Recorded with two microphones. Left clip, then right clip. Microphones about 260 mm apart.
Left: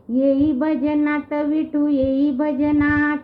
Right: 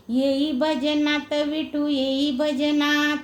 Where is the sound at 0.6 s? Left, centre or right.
Centre.